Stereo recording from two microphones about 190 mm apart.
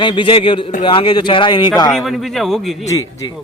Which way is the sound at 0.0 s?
25° left (ahead or behind).